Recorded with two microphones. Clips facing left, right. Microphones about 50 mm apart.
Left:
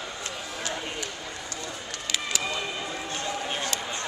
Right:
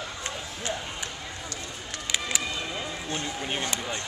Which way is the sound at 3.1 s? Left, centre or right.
Centre.